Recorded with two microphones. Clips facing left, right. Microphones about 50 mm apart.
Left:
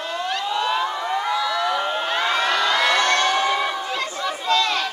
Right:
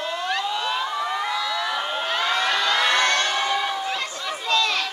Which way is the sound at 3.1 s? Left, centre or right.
Left.